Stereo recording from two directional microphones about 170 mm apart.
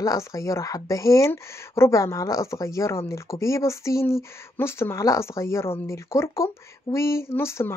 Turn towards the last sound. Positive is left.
turn(degrees=15)  # may be behind; listen again after turning